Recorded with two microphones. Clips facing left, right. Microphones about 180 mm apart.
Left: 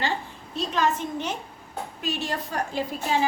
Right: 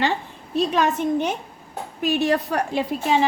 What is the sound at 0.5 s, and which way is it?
A woman's voice, 65° right (ahead or behind).